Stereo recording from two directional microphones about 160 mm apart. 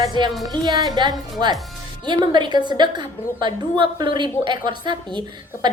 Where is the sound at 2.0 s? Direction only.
30° right (ahead or behind).